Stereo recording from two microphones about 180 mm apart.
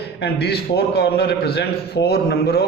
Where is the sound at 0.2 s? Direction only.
65° left (ahead or behind).